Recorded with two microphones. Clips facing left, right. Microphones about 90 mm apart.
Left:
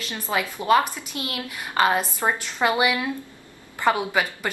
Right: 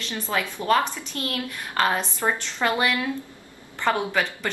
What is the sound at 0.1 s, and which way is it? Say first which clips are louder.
A woman's voice: left 1 dB; 15° left (ahead or behind).